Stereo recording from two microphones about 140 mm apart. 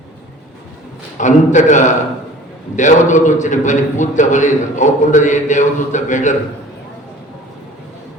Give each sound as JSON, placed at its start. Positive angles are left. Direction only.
{"t": 1.2, "sound": "a man's voice", "side_deg": 60}